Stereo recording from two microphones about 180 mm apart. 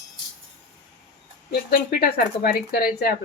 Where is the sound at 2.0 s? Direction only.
55° left (ahead or behind).